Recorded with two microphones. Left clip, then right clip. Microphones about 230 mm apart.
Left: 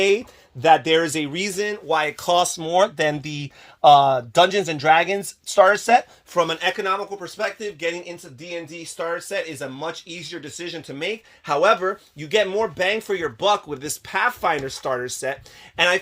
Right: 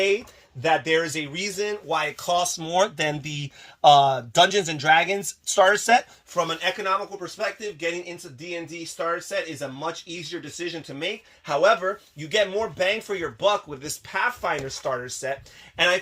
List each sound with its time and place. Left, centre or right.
0.6 s speech: left
6.3 s speech: left